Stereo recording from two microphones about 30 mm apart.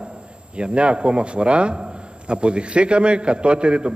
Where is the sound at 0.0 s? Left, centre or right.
Right.